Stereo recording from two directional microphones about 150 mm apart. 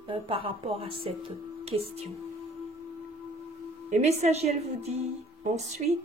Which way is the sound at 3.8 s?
50° right (ahead or behind).